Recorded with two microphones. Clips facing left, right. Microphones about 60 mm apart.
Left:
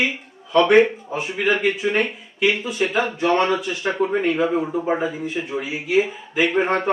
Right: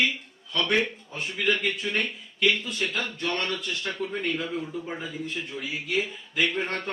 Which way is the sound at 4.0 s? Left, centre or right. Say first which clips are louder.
Left 12 dB; left.